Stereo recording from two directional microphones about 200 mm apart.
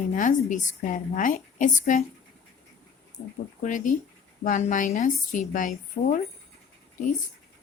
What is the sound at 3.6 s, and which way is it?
A woman's voice, 40° left (ahead or behind).